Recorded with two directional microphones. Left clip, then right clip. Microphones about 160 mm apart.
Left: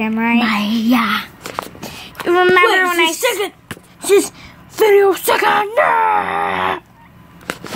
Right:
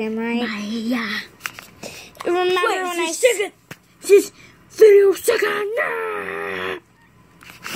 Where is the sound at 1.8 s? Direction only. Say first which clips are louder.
Left 5 dB; centre (ahead or behind).